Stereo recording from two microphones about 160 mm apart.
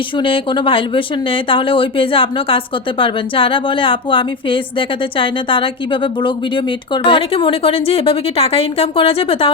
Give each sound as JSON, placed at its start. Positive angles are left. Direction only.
{"t": 0.2, "sound": "a woman's voice", "side_deg": 30}